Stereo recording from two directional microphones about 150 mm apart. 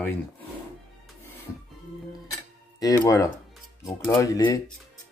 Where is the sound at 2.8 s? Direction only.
20° left (ahead or behind).